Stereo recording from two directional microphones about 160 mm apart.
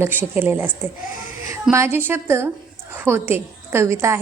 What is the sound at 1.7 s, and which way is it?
A woman's voice, 15° right (ahead or behind).